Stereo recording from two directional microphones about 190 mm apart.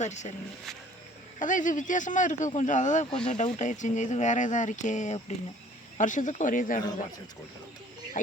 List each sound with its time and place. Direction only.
0.0 s speech: 40° left (ahead or behind)
1.4 s speech: 40° left (ahead or behind)
8.1 s speech: 45° left (ahead or behind)